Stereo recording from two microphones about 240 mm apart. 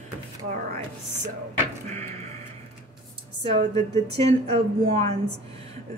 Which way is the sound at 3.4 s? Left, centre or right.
Right.